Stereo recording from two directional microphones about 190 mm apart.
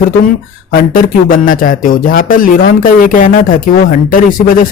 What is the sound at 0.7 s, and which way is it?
Speech, 50° left (ahead or behind).